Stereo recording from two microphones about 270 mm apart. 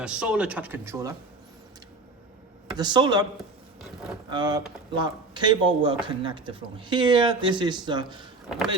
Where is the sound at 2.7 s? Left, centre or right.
Centre.